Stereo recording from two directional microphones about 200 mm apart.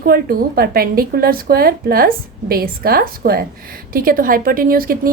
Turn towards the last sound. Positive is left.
turn(degrees=-45)  # may be behind; listen again after turning